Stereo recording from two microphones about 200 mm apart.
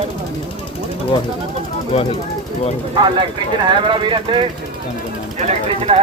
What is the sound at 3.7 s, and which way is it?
Speech, 25° right (ahead or behind).